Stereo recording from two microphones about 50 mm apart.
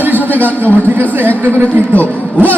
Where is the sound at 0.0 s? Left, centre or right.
Right.